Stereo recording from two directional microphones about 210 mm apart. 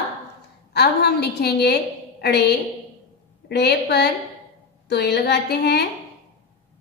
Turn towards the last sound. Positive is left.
turn(degrees=50)  # may be behind; listen again after turning